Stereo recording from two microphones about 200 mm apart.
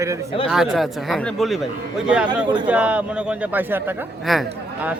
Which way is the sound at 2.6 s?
5° right (ahead or behind).